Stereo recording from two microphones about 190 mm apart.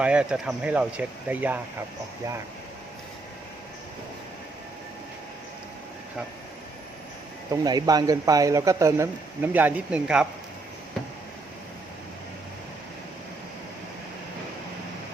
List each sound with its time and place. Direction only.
0.0 s speech: 5° right (ahead or behind)
7.5 s speech: 20° right (ahead or behind)